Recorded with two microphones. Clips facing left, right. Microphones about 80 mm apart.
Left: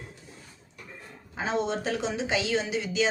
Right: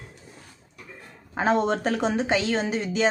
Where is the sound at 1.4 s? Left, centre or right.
Right.